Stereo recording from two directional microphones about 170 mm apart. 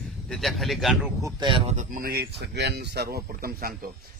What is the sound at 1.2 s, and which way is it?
Speech, 20° right (ahead or behind).